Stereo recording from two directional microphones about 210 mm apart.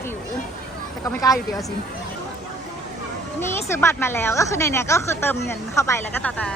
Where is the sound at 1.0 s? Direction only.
15° left (ahead or behind).